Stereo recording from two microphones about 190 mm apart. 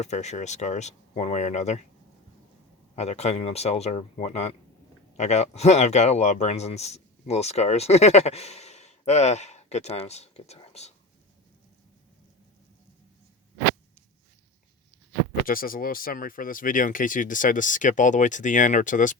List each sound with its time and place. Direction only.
0.0 s speech: 35° left (ahead or behind)
2.9 s speech: 35° left (ahead or behind)
15.4 s speech: 50° left (ahead or behind)